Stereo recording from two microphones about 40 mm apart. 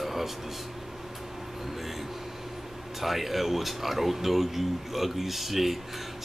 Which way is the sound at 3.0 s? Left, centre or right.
Centre.